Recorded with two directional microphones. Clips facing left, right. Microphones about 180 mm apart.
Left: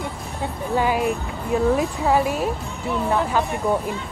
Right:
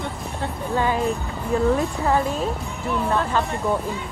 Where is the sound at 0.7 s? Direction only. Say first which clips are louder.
Left 1 dB; 10° left (ahead or behind).